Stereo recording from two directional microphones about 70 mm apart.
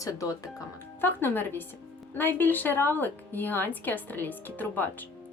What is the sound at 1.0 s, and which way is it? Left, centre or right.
A woman's voice, left.